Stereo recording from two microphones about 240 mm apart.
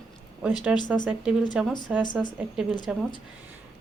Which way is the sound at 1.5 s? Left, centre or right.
Centre.